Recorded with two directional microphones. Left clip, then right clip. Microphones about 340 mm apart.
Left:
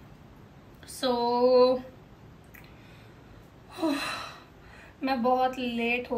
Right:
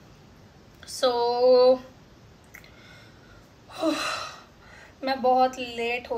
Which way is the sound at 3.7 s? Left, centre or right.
Right.